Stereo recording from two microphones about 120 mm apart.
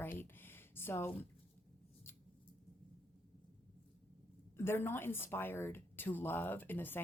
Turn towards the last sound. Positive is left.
turn(degrees=15)  # may be behind; listen again after turning